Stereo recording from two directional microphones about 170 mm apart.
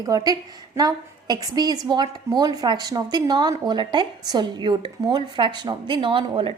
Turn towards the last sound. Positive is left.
turn(degrees=-30)  # may be behind; listen again after turning